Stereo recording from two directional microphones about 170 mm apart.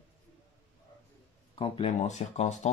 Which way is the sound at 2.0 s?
40° left (ahead or behind).